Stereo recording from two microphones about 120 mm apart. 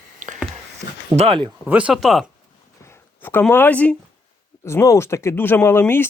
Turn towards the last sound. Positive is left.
turn(degrees=20)  # may be behind; listen again after turning